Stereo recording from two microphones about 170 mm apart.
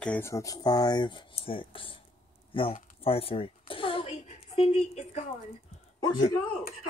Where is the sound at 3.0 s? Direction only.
35° left (ahead or behind).